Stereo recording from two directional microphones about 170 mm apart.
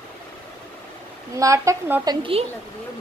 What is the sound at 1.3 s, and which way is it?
Speech, 20° right (ahead or behind).